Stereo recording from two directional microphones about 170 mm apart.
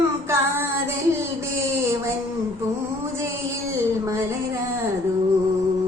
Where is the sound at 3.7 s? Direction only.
15° right (ahead or behind).